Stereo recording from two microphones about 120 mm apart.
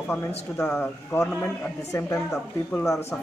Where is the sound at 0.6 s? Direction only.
20° left (ahead or behind).